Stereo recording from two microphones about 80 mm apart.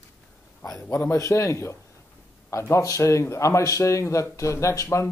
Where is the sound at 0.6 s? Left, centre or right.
Left.